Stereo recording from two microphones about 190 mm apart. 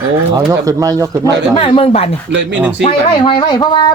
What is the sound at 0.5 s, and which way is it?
Speech, 15° right (ahead or behind).